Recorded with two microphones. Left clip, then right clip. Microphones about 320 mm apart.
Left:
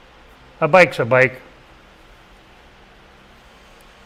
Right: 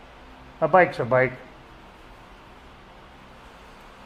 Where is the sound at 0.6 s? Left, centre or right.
Left.